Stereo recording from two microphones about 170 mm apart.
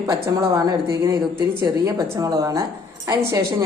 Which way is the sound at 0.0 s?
20° right (ahead or behind).